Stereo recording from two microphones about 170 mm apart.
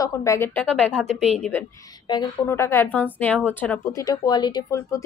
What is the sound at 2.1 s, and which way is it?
Speech, 20° left (ahead or behind).